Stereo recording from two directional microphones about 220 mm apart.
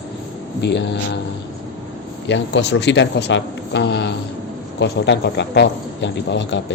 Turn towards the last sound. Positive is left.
turn(degrees=55)  # may be behind; listen again after turning